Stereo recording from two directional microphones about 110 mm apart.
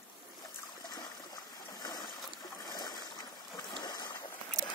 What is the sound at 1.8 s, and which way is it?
Boat, 35° left (ahead or behind).